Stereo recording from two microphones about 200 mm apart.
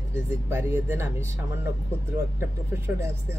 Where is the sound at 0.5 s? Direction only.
10° right (ahead or behind).